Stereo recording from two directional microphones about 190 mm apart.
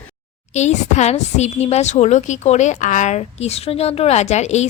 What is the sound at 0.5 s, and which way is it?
A woman's voice, 35° left (ahead or behind).